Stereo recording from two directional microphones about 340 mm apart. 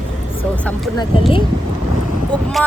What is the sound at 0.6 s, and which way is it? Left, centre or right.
Speech, centre.